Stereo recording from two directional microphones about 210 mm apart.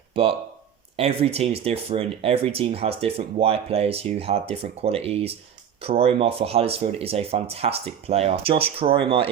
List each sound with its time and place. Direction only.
0.1 s speech: 25° right (ahead or behind)